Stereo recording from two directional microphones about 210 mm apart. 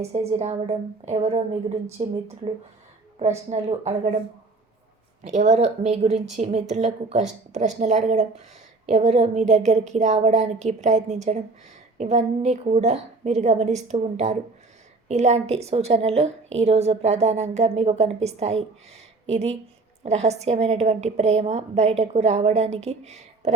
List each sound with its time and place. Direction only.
0.0 s a woman's voice: 30° right (ahead or behind)
5.2 s a woman's voice: 35° right (ahead or behind)